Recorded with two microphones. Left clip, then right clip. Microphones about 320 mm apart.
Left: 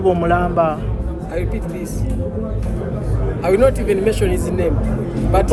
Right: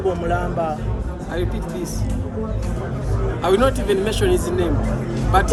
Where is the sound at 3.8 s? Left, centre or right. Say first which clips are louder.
Left 2 dB; centre.